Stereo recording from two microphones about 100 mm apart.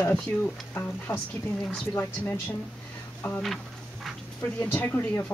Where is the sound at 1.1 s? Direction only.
40° left (ahead or behind).